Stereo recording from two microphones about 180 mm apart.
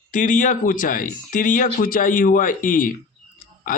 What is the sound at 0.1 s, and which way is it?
Speech, 45° left (ahead or behind).